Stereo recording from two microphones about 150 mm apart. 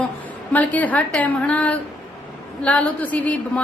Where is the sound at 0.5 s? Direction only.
10° left (ahead or behind).